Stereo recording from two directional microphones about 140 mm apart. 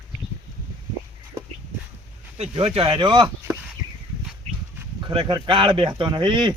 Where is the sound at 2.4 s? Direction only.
45° right (ahead or behind).